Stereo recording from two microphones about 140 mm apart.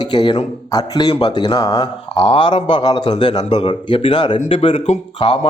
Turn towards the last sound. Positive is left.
turn(degrees=40)  # may be behind; listen again after turning